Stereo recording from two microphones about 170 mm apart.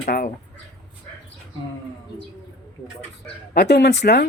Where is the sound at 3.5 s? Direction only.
80° left.